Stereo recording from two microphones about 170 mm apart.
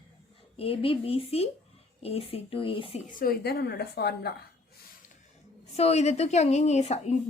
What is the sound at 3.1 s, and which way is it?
A woman's voice, 60° left (ahead or behind).